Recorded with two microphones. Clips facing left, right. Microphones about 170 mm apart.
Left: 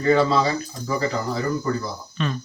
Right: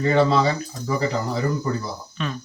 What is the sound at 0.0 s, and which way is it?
A man's voice, 20° right (ahead or behind).